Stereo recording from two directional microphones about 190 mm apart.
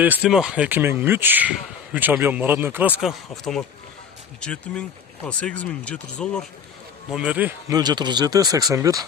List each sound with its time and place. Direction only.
0.0 s speech: 5° right (ahead or behind)
7.1 s speech: 5° right (ahead or behind)
7.8 s speech: 20° right (ahead or behind)